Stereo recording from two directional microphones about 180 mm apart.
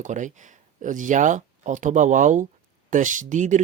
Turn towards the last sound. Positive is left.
turn(degrees=-40)  # may be behind; listen again after turning